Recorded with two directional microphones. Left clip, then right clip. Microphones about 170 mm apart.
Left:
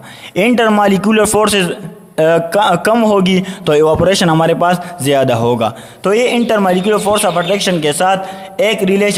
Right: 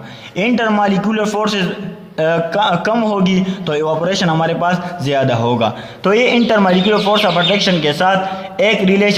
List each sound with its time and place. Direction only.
0.3 s a man's voice: 45° left (ahead or behind)